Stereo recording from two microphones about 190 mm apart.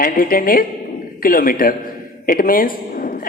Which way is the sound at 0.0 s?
50° left (ahead or behind).